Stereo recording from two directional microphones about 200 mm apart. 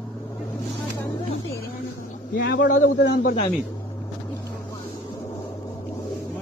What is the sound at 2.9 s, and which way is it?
Speech, 55° left (ahead or behind).